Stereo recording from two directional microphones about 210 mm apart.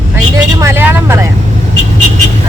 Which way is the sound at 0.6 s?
10° right (ahead or behind).